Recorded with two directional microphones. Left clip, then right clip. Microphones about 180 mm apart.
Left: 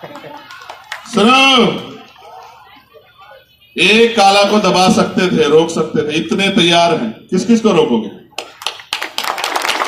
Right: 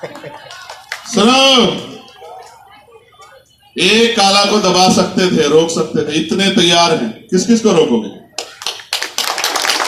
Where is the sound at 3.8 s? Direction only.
15° left (ahead or behind).